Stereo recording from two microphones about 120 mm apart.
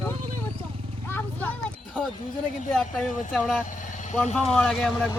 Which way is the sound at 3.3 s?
Centre (ahead or behind).